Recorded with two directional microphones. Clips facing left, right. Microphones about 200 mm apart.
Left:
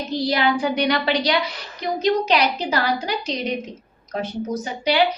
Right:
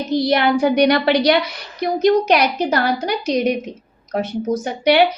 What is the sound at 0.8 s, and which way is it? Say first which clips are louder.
A woman's voice: right 6 dB; 65° right (ahead or behind).